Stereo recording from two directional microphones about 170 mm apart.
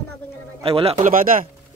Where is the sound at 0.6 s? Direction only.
35° right (ahead or behind); by 1.5 s 55° right (ahead or behind).